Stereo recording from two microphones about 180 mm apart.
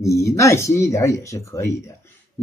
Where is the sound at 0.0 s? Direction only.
15° left (ahead or behind).